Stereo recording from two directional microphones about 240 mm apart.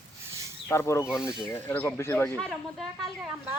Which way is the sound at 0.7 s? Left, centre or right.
Centre.